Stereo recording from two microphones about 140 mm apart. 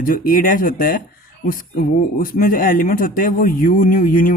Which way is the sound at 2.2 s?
85° left.